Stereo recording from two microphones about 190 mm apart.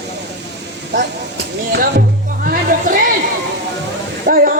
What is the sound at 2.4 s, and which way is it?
Music, 45° right (ahead or behind).